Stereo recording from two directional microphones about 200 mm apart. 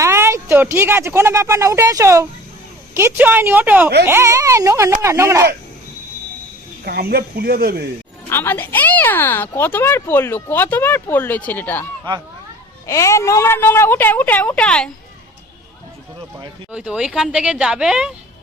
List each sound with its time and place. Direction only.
0.0 s speech: 15° right (ahead or behind)
6.8 s speech: 50° right (ahead or behind)
8.3 s speech: 10° left (ahead or behind)
12.9 s speech: 15° left (ahead or behind)
16.7 s speech: 5° right (ahead or behind)